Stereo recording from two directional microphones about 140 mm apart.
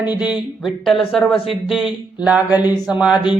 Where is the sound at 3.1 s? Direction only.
35° left (ahead or behind).